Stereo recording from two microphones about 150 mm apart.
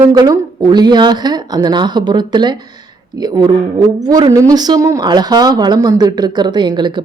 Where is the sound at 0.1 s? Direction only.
25° right (ahead or behind).